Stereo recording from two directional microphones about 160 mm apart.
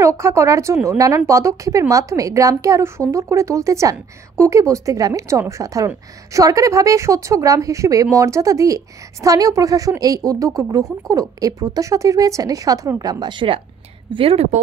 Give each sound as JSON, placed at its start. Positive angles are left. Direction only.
{"t": 0.0, "sound": "a woman's voice", "side_deg": -15}